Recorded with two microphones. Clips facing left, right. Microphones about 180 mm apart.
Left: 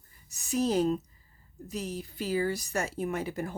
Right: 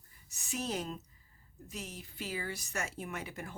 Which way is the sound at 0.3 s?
35° left (ahead or behind).